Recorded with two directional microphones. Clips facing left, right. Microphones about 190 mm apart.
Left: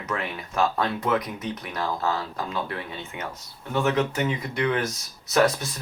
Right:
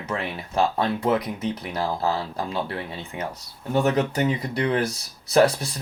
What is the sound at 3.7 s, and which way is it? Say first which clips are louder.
Speech: right 2 dB; 35° right (ahead or behind).